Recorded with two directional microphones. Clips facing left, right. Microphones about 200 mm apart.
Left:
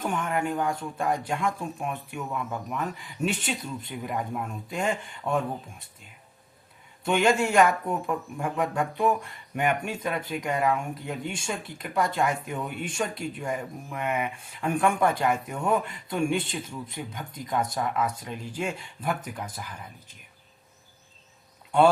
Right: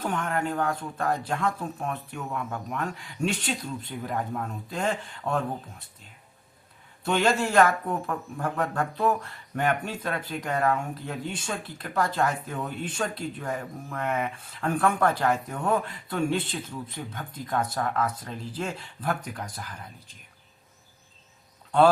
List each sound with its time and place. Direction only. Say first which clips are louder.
0.0 s speech: even; 10° left (ahead or behind)
7.0 s speech: left 1 dB; 10° left (ahead or behind)